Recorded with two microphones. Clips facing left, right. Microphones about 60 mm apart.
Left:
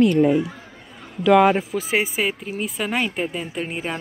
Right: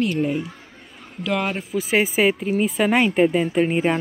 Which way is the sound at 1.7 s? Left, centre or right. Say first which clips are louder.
Right 1 dB; left.